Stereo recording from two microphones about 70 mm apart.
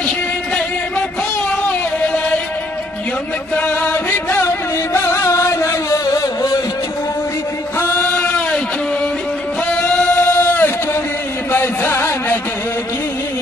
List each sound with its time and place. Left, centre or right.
1.7 s music: centre
3.5 s music: left
7.8 s singing: left
9.8 s singing: centre
10.1 s a sound: left
11.5 s music: left